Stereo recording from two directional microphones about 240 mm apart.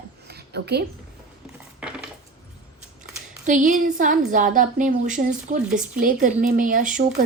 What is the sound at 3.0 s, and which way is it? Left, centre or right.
Speech, right.